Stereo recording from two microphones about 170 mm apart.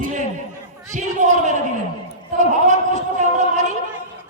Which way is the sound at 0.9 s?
45° right (ahead or behind).